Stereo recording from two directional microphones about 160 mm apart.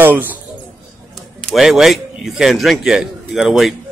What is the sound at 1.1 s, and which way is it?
Speech, centre (ahead or behind).